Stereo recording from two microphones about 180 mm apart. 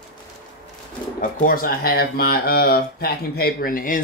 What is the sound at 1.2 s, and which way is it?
Speech, 50° left (ahead or behind).